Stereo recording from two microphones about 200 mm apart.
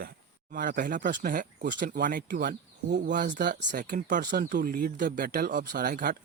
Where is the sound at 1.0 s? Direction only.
55° right (ahead or behind).